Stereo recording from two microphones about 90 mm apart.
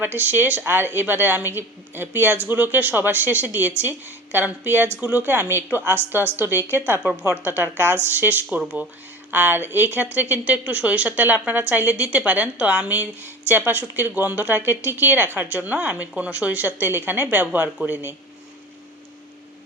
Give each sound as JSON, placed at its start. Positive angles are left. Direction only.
{"t": 0.0, "sound": "a woman's voice", "side_deg": -20}
{"t": 9.3, "sound": "a woman's voice", "side_deg": -20}